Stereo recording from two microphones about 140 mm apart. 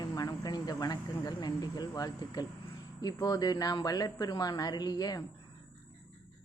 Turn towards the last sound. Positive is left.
turn(degrees=30)  # may be behind; listen again after turning